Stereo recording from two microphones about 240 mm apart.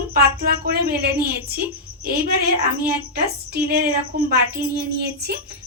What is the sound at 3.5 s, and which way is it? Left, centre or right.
A woman's voice, right.